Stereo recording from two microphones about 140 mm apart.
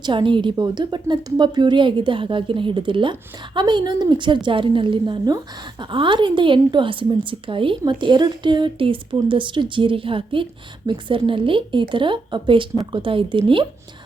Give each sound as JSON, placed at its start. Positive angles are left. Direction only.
{"t": 0.0, "sound": "a woman's voice", "side_deg": -35}